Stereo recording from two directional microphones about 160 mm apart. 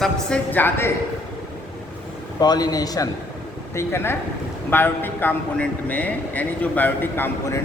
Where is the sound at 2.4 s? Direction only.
25° left (ahead or behind).